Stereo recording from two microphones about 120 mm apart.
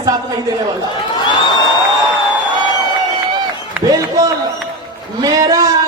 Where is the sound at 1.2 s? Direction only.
35° left (ahead or behind).